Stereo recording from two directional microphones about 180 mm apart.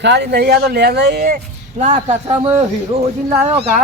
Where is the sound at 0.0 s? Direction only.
70° right (ahead or behind).